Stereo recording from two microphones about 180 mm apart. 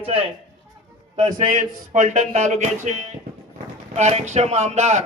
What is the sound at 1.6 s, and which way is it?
Speech, 40° right (ahead or behind).